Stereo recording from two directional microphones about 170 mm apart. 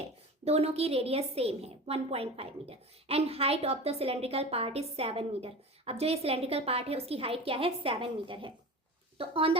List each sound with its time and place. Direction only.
0.0 s speech: 35° right (ahead or behind)